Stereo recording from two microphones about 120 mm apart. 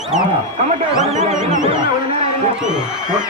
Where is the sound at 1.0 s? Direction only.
65° right (ahead or behind).